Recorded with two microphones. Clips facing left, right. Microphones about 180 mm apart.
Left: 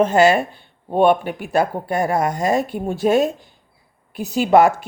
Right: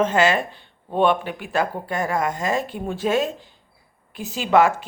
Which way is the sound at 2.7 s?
45° left (ahead or behind).